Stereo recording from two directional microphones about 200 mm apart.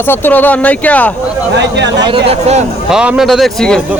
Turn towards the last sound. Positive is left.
turn(degrees=0)  # may be behind; listen again after turning